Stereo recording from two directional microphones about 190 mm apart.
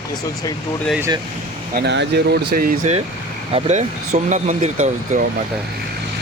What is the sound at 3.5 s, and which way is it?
Speech, 35° right (ahead or behind).